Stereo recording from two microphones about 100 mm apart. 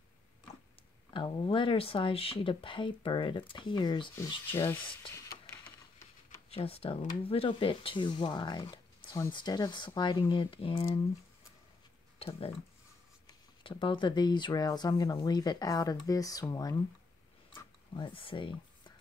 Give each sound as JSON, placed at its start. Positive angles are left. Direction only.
{"t": 1.1, "sound": "speech", "side_deg": 55}
{"t": 4.5, "sound": "speech", "side_deg": 25}
{"t": 5.1, "sound": "a sound", "side_deg": 25}
{"t": 6.5, "sound": "speech", "side_deg": 75}
{"t": 7.2, "sound": "speech", "side_deg": 65}
{"t": 12.2, "sound": "speech", "side_deg": 75}
{"t": 13.7, "sound": "speech", "side_deg": 60}
{"t": 17.5, "sound": "a sound", "side_deg": 50}